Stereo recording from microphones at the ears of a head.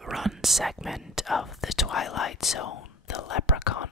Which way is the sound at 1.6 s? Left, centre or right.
Left.